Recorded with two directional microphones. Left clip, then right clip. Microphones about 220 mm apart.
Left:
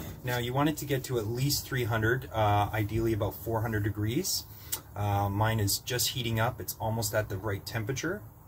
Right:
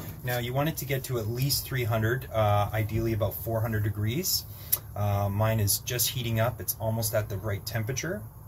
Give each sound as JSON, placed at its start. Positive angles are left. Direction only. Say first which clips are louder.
{"t": 0.2, "sound": "speech", "louder": "even", "side_deg": 0}